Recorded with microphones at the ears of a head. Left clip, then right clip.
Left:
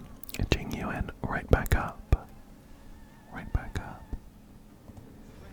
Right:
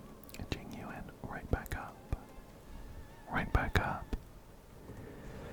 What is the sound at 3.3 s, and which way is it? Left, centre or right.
Whispering, right.